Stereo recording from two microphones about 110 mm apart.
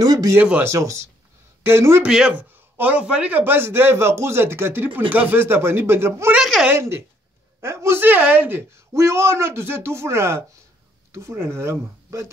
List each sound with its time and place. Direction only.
0.0 s a sound: 35° right (ahead or behind)
0.4 s speech: 15° right (ahead or behind)
0.7 s a man's voice: 25° right (ahead or behind)
2.0 s a man's voice: 10° right (ahead or behind)
6.3 s a sound: 5° right (ahead or behind)
6.7 s a man's voice: 25° right (ahead or behind)